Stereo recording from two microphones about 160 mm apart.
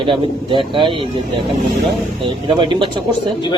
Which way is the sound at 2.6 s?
30° right (ahead or behind).